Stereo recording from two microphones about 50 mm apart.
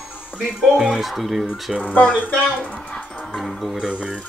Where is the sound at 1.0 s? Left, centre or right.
Centre.